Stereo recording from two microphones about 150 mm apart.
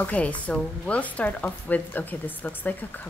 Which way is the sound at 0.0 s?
10° left (ahead or behind).